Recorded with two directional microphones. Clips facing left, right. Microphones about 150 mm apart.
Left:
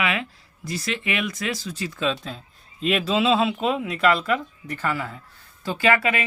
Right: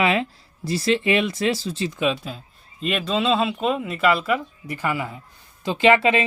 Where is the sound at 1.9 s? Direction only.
10° right (ahead or behind).